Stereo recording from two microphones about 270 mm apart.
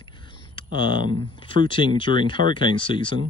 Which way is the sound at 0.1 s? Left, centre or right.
Centre.